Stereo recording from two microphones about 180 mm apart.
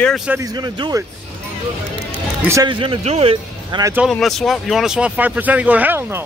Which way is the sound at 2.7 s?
30° right (ahead or behind).